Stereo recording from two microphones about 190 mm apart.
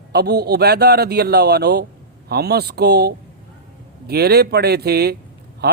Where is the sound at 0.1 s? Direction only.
55° right (ahead or behind).